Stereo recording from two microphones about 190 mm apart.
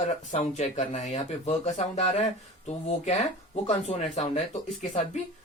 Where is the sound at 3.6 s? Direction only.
35° left (ahead or behind).